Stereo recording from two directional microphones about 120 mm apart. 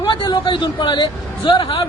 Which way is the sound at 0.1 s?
40° left (ahead or behind).